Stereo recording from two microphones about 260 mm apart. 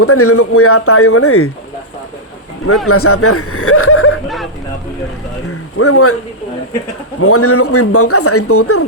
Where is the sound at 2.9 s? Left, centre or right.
Left.